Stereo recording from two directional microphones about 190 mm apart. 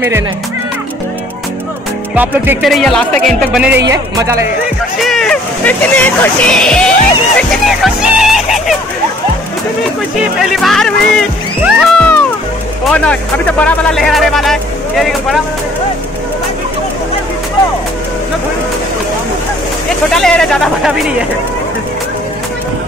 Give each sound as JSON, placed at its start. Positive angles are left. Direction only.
{"t": 2.1, "sound": "a man's voice", "side_deg": -10}
{"t": 2.7, "sound": "speech", "side_deg": 0}
{"t": 3.8, "sound": "a man's voice", "side_deg": -15}
{"t": 5.0, "sound": "speech", "side_deg": 0}
{"t": 10.4, "sound": "speech", "side_deg": 0}
{"t": 20.2, "sound": "speech", "side_deg": 5}